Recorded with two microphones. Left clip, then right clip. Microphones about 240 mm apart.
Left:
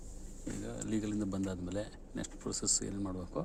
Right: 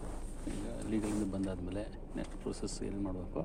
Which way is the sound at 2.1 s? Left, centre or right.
Left.